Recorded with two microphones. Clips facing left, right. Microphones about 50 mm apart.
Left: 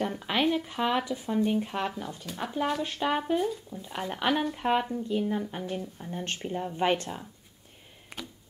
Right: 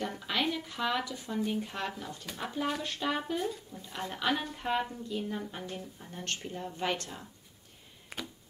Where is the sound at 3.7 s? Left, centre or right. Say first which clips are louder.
Left 5 dB; left.